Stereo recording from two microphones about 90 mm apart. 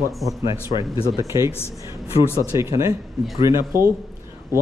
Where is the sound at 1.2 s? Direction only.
35° right (ahead or behind).